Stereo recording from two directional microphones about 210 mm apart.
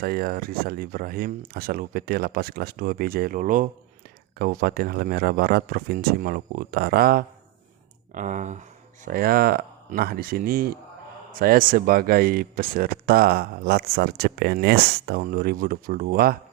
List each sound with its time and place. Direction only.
0.0 s speech: 45° right (ahead or behind)